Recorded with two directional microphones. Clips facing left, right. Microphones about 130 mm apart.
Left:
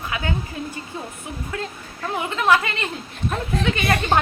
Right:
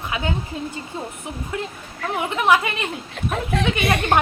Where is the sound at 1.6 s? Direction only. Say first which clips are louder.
Right 1 dB; 20° right (ahead or behind).